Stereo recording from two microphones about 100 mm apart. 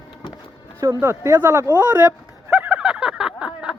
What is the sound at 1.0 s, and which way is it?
Speech, 25° right (ahead or behind).